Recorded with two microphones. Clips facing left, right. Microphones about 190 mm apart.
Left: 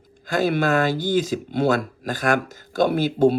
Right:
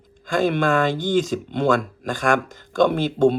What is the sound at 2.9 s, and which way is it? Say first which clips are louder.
Speech: even; 5° left (ahead or behind).